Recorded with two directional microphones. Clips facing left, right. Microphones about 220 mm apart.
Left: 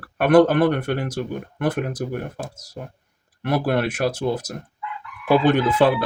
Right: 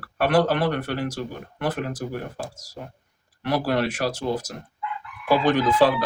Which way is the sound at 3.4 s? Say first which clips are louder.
Left 2 dB; 55° left (ahead or behind).